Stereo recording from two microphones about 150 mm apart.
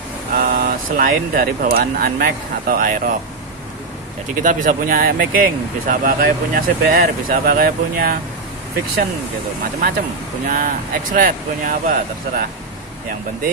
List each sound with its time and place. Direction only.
0.3 s speech: 70° right (ahead or behind)
4.4 s speech: 60° right (ahead or behind)
9.6 s speech: 70° right (ahead or behind)